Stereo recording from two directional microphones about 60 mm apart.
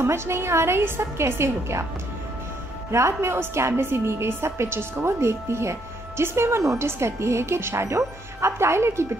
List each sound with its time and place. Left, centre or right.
0.0 s a woman's voice: right
2.9 s a woman's voice: right